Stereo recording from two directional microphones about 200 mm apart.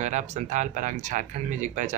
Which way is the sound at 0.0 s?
35° right (ahead or behind).